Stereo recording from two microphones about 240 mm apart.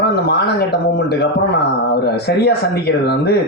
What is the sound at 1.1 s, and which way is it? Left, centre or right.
A man's voice, left.